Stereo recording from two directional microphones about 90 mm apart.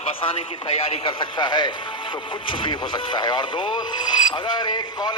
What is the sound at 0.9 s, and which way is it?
A man's voice, 70° left (ahead or behind).